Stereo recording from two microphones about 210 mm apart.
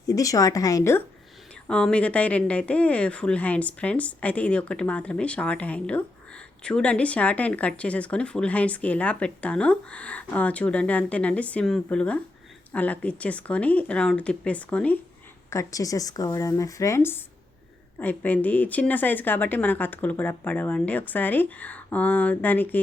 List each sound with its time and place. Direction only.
0.1 s a woman's voice: 15° left (ahead or behind)